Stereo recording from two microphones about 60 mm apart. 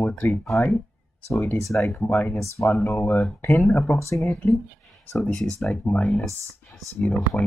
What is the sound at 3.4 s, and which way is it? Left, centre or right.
Speech, left.